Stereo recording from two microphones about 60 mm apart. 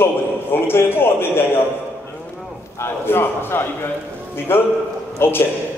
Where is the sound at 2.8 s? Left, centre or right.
Left.